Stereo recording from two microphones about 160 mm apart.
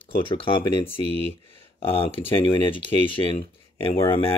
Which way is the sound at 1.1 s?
35° right (ahead or behind).